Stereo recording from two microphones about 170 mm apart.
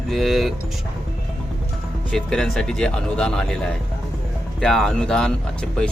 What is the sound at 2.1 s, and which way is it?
Speech, 5° left (ahead or behind).